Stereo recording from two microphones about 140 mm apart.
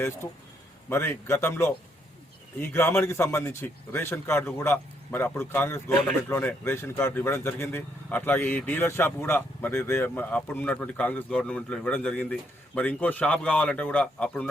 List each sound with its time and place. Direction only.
0.9 s a man's voice: 15° left (ahead or behind)